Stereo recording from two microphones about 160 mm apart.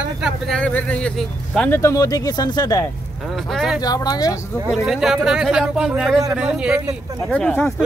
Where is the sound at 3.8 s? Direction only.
25° left (ahead or behind).